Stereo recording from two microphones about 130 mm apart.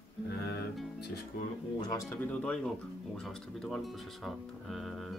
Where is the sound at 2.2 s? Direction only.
10° left (ahead or behind).